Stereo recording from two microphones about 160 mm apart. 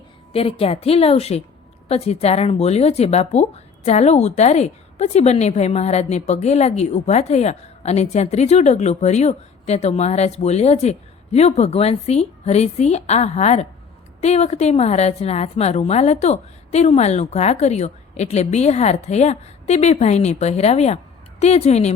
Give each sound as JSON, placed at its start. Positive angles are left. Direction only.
{"t": 0.3, "sound": "a woman's voice", "side_deg": 40}